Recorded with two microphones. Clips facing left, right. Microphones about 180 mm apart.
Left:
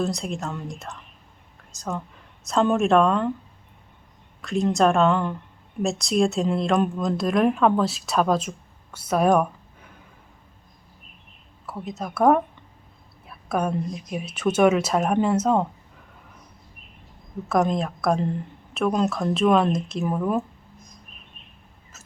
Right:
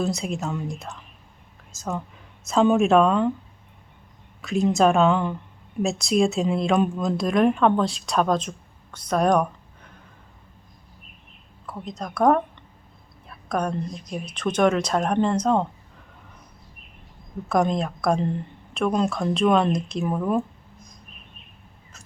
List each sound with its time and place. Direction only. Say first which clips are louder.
0.0 s speech: right 1 dB; centre (ahead or behind)
4.4 s speech: right 1 dB; centre (ahead or behind)
11.6 s speech: left 1 dB; 5° left (ahead or behind)
17.5 s speech: even; centre (ahead or behind)